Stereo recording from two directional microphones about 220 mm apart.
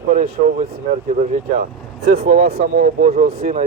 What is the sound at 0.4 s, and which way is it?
Speech, 35° right (ahead or behind).